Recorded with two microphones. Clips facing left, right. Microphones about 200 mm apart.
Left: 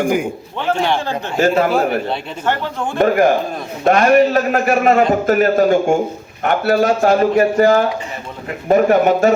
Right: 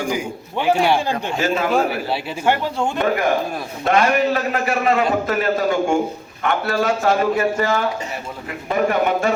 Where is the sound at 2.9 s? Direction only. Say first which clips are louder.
Left 8 dB; 45° left (ahead or behind).